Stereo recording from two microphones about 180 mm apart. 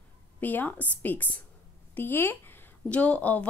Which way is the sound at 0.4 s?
10° left (ahead or behind).